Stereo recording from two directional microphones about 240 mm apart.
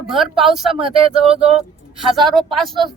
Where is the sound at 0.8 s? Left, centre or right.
Right.